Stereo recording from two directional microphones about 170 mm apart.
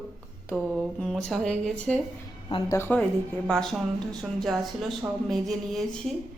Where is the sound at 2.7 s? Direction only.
10° left (ahead or behind).